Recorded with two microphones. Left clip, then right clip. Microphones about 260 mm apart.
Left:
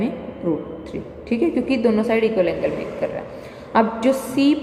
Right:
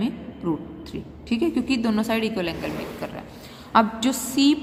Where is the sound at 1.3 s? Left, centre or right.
Centre.